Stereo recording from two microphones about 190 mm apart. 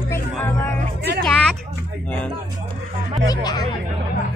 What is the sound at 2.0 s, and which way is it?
Speech, 10° left (ahead or behind).